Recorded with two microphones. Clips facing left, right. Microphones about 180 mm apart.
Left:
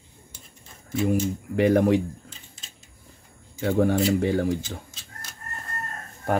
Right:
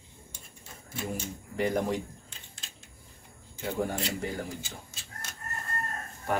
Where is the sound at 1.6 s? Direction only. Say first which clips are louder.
Left 9 dB; 65° left (ahead or behind).